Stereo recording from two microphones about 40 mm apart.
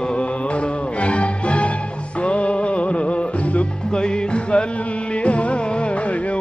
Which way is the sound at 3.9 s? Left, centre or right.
Left.